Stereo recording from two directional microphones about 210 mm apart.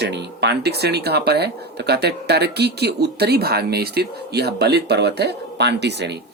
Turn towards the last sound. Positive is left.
turn(degrees=-55)  # may be behind; listen again after turning